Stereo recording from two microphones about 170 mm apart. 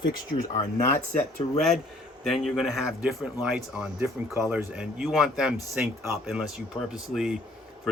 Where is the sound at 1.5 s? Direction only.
Centre (ahead or behind).